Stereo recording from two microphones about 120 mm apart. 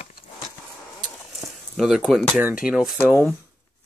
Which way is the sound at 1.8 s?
5° right (ahead or behind).